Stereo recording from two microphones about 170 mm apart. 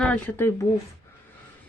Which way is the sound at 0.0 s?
10° left (ahead or behind).